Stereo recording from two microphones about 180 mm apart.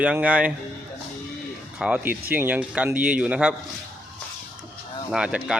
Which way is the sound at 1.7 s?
5° right (ahead or behind).